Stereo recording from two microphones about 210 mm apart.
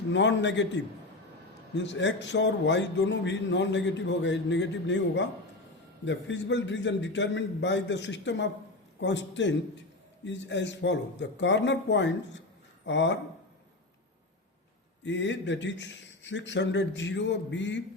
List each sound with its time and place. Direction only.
0.1 s a man's voice: 60° left (ahead or behind)
15.0 s a man's voice: 60° left (ahead or behind)